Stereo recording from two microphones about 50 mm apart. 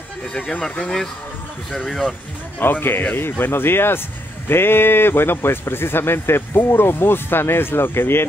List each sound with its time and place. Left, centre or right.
0.3 s speech: centre
1.8 s speech: centre
2.6 s speech: left